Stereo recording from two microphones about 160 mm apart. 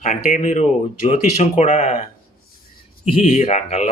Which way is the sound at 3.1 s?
45° left (ahead or behind).